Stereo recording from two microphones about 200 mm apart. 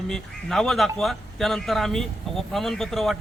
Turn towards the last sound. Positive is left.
turn(degrees=0)  # may be behind; listen again after turning